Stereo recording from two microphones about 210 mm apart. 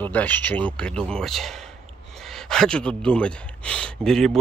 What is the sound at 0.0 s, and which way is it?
Speech, 5° left (ahead or behind).